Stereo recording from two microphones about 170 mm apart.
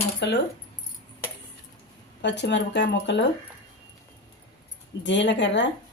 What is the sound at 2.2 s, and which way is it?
Speech, 90° left.